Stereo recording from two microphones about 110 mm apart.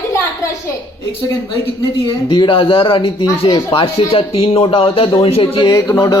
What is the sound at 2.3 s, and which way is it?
Speech, 50° left (ahead or behind).